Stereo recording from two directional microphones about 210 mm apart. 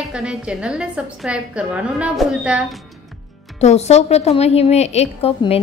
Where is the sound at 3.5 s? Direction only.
30° left (ahead or behind).